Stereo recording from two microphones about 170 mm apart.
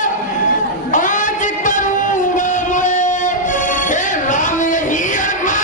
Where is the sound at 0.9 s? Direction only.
50° left (ahead or behind).